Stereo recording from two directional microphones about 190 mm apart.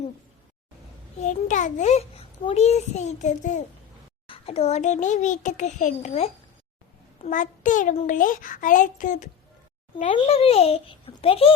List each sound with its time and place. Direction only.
1.2 s a child's voice: 40° left (ahead or behind)